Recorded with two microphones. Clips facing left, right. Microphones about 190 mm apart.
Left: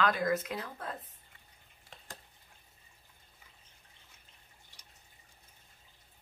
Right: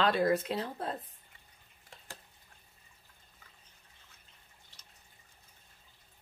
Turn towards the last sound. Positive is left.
turn(degrees=15)  # may be behind; listen again after turning